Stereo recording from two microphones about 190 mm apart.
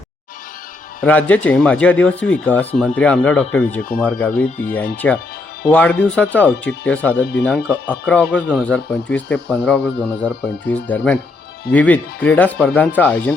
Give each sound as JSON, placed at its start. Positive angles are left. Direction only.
{"t": 1.0, "sound": "speech", "side_deg": 5}
{"t": 7.2, "sound": "speech", "side_deg": 70}
{"t": 7.9, "sound": "speech", "side_deg": 10}